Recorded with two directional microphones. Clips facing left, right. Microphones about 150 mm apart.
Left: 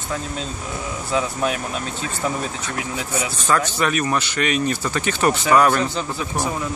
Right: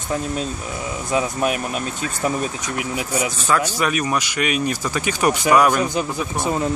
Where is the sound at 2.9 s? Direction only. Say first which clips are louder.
Right 4 dB; 10° right (ahead or behind).